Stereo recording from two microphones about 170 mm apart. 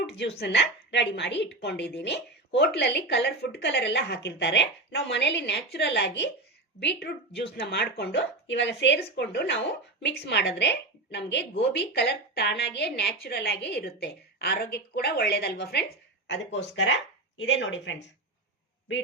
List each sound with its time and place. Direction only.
0.0 s bow-wow: 90° left
0.3 s speech: 90° left
5.7 s speech: 75° left (ahead or behind)
7.5 s speech: 70° left (ahead or behind); by 9.0 s 90° left
9.1 s speech: 75° left (ahead or behind)
11.8 s a woman's voice: 75° left (ahead or behind)
16.2 s speech: 90° left